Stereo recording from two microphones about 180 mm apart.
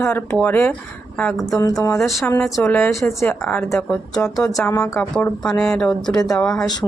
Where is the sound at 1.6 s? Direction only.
20° left (ahead or behind).